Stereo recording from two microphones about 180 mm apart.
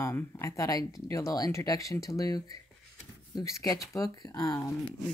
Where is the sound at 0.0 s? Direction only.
15° left (ahead or behind).